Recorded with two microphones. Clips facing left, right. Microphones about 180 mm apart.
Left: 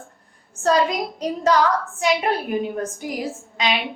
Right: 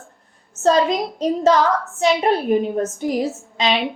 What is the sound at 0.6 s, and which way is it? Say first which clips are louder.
Speech: right 3 dB; 25° right (ahead or behind).